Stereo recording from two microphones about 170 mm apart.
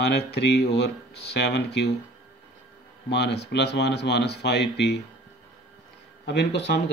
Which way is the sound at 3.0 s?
90° left.